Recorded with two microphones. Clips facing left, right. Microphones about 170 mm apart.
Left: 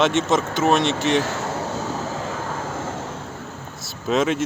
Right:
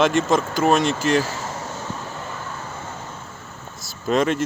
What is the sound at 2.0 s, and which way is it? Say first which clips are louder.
Vehicle: left 5 dB; 90° left.